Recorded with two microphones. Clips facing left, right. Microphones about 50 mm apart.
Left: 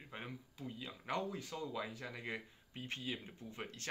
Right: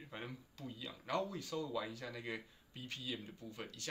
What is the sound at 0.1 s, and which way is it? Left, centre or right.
Speech, centre.